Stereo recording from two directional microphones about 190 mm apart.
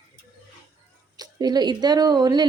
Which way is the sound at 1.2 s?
20° right (ahead or behind).